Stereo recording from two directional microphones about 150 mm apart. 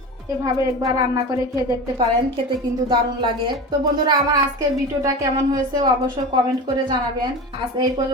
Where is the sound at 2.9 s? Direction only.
30° right (ahead or behind).